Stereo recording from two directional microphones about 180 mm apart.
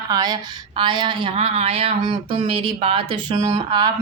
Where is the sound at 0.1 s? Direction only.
20° right (ahead or behind).